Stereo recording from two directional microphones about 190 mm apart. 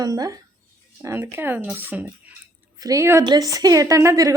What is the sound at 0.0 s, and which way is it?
A woman's voice, 20° right (ahead or behind).